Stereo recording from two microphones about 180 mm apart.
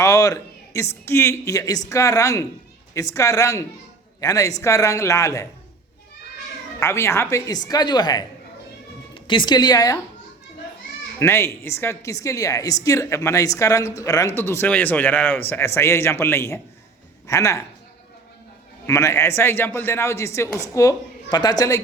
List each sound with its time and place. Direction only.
0.0 s a sound: 20° left (ahead or behind)
1.0 s speech: 15° left (ahead or behind)
6.7 s a woman's voice: 15° left (ahead or behind)
11.2 s speech: 15° left (ahead or behind)
18.9 s speech: 15° left (ahead or behind)